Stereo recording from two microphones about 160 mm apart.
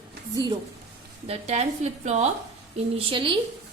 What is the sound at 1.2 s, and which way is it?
A woman's voice, 40° right (ahead or behind).